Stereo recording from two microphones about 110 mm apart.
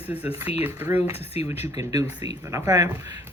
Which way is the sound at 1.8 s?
35° right (ahead or behind).